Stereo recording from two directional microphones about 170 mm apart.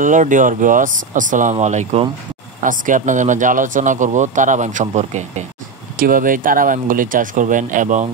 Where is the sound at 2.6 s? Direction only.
50° right (ahead or behind).